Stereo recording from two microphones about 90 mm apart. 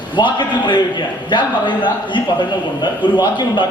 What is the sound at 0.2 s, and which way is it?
A man's voice, 60° left (ahead or behind).